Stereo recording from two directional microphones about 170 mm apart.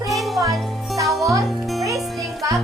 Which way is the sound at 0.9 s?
20° right (ahead or behind).